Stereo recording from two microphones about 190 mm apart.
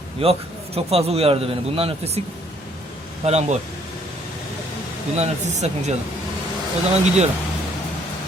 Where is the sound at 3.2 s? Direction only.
35° right (ahead or behind).